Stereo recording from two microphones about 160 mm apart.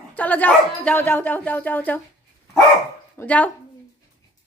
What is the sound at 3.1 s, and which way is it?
Speech, 10° left (ahead or behind).